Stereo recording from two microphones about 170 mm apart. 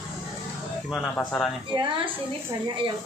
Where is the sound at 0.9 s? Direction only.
5° left (ahead or behind).